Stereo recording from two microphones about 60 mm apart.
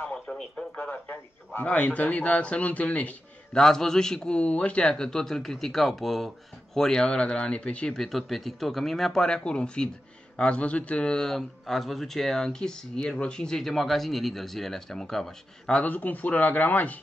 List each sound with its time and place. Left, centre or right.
0.0 s radio: centre
0.9 s a man's voice: left
1.7 s speech: left
3.5 s a man's voice: centre
7.9 s a man's voice: centre
15.8 s speech: left